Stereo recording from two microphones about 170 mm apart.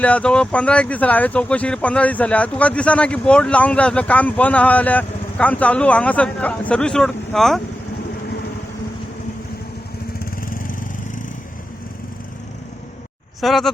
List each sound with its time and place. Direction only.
0.0 s speech: 5° left (ahead or behind)
10.4 s lawn mower: 55° left (ahead or behind)
13.4 s speech: centre (ahead or behind)